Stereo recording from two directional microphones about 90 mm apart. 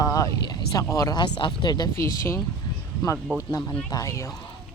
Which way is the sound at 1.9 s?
30° left (ahead or behind).